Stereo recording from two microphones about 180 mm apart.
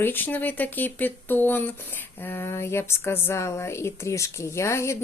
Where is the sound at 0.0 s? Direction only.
10° left (ahead or behind).